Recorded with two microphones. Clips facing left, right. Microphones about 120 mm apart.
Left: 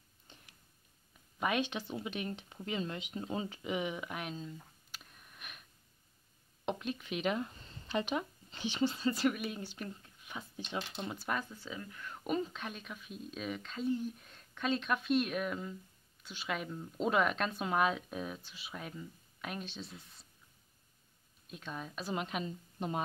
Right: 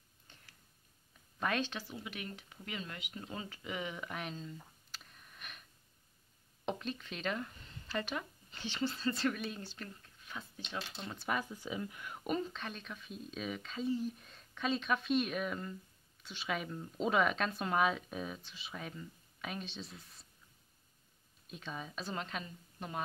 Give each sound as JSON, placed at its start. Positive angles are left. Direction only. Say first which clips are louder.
{"t": 0.3, "sound": "a sound", "louder": "left 4 dB", "side_deg": 20}
{"t": 1.4, "sound": "speech", "louder": "left 2 dB", "side_deg": 10}
{"t": 6.6, "sound": "speech", "louder": "left 2 dB", "side_deg": 5}
{"t": 9.8, "sound": "a sound", "louder": "left 4 dB", "side_deg": 15}
{"t": 10.7, "sound": "speech", "louder": "left 4 dB", "side_deg": 15}
{"t": 11.1, "sound": "speech", "louder": "right 2 dB", "side_deg": -5}
{"t": 11.5, "sound": "speech", "louder": "right 4 dB", "side_deg": -15}
{"t": 12.2, "sound": "speech", "louder": "left 1 dB", "side_deg": 0}
{"t": 21.5, "sound": "speech", "louder": "left 1 dB", "side_deg": 0}
{"t": 22.1, "sound": "speech", "louder": "left 6 dB", "side_deg": 15}